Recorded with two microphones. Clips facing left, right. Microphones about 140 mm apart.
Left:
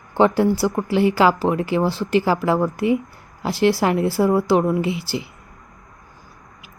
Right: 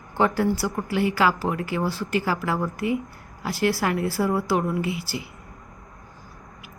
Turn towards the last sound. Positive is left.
turn(degrees=25)  # may be behind; listen again after turning